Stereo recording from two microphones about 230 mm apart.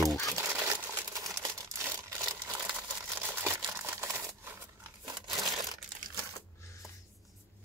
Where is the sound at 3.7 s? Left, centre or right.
Centre.